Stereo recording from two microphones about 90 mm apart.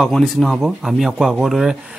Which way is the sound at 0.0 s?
5° left (ahead or behind).